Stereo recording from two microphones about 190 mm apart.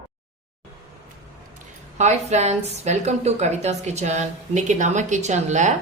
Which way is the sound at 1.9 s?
35° right (ahead or behind).